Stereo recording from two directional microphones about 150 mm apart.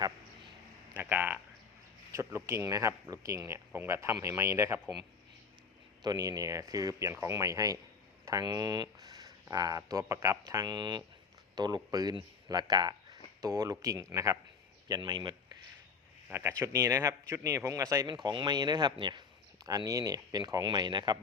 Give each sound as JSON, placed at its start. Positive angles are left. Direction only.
{"t": 0.9, "sound": "a sound", "side_deg": -10}
{"t": 2.1, "sound": "speech", "side_deg": -20}
{"t": 6.0, "sound": "speech", "side_deg": -25}
{"t": 16.3, "sound": "speech", "side_deg": -15}